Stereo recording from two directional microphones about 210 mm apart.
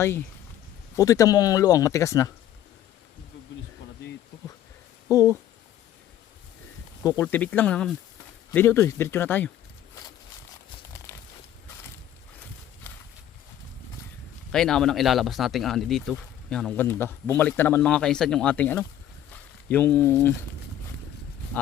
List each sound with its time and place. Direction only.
0.9 s speech: 15° left (ahead or behind)
5.0 s speech: 15° left (ahead or behind)
7.0 s speech: 15° left (ahead or behind)
12.9 s a sound: 10° left (ahead or behind)
14.5 s speech: 5° left (ahead or behind)